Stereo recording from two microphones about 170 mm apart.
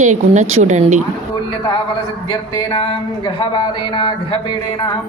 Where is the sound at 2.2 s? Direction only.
30° left (ahead or behind).